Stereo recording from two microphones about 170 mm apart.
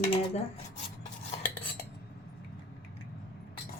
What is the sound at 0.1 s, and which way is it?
Speech, 35° left (ahead or behind).